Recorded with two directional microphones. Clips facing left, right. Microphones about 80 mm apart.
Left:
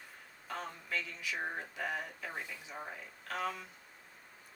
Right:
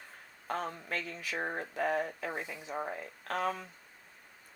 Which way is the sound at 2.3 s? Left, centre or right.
Right.